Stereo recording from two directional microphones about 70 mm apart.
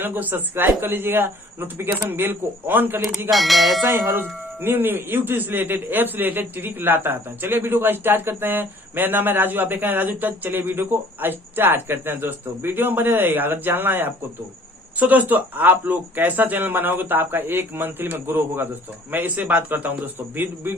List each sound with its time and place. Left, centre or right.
0.0 s speech: right
3.3 s bell: centre
4.2 s speech: right